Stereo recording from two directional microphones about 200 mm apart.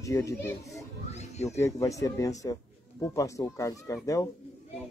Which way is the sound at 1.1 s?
35° left (ahead or behind).